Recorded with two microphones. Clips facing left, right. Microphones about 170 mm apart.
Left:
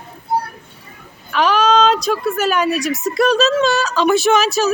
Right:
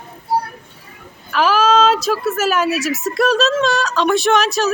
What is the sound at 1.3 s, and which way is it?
Speech, 5° right (ahead or behind).